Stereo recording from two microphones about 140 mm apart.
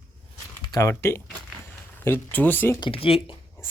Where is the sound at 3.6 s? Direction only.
15° left (ahead or behind).